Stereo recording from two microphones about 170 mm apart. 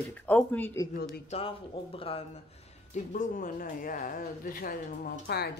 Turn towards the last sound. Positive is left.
turn(degrees=70)  # may be behind; listen again after turning